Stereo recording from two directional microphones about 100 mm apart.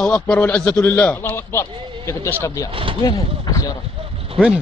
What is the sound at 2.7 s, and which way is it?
Speech, 60° right (ahead or behind).